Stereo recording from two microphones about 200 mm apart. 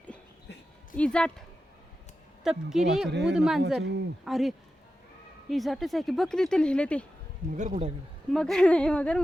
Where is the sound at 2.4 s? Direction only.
Centre (ahead or behind).